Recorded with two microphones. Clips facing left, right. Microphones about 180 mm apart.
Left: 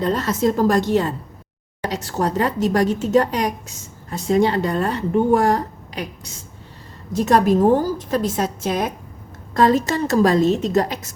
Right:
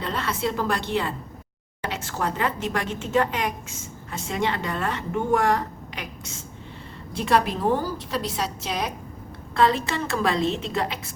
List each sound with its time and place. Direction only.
0.0 s a woman's voice: 40° left (ahead or behind)